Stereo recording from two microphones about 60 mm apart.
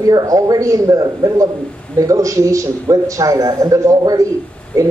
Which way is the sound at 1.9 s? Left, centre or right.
Right.